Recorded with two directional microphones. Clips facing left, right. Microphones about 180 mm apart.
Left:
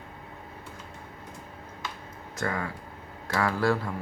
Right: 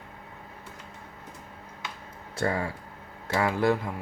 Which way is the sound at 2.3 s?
30° right (ahead or behind).